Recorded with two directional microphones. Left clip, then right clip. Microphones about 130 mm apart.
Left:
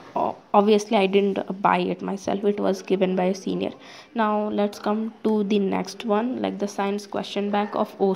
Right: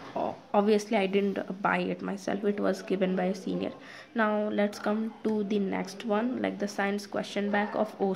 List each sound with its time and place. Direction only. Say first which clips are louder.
0.1 s a sound: left 8 dB; 30° left (ahead or behind)
1.3 s speech: left 7 dB; 30° left (ahead or behind)
4.3 s a woman's voice: left 5 dB; 15° left (ahead or behind)
5.2 s speech: left 9 dB; 35° left (ahead or behind)